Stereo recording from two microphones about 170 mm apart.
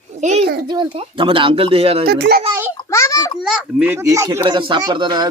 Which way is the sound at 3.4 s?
Centre (ahead or behind).